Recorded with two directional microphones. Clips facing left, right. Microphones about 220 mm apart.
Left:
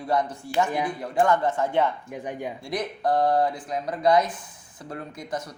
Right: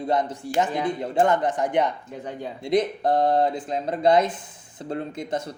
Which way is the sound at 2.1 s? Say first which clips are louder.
Left 1 dB; 15° left (ahead or behind).